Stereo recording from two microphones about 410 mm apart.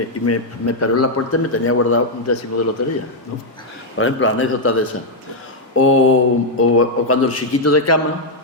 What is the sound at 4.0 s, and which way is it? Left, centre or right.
Speech, left.